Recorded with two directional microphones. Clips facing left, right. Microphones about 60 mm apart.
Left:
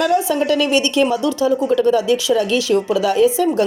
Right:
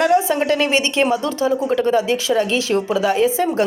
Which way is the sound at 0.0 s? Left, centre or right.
Right.